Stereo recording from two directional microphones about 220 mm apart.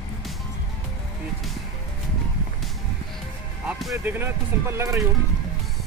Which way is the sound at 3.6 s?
5° right (ahead or behind).